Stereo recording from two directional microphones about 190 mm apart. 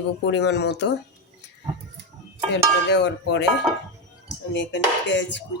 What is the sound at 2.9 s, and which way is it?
Speech, 65° left (ahead or behind).